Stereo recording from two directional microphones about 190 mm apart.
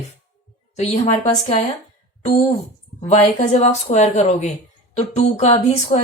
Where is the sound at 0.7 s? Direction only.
35° left (ahead or behind).